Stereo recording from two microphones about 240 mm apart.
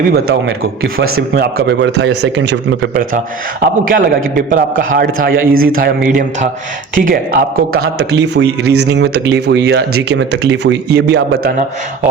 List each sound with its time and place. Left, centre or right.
0.1 s a man's voice: right
8.6 s speech: right
8.9 s speech: right